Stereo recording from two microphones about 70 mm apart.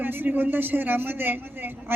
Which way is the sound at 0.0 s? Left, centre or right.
Right.